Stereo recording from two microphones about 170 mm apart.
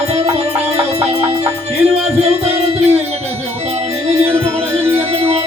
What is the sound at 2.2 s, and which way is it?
Music, 40° right (ahead or behind).